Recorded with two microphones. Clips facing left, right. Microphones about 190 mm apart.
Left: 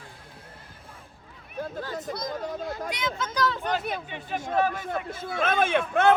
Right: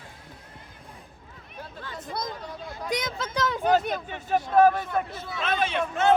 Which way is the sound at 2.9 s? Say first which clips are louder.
Right 1 dB; 40° right (ahead or behind).